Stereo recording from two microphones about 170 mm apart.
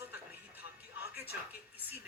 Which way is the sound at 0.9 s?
10° right (ahead or behind).